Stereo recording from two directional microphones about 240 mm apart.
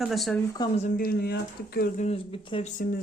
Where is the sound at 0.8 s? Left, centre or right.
Left.